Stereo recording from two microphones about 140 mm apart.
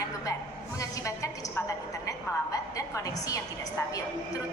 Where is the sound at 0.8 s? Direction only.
20° left (ahead or behind).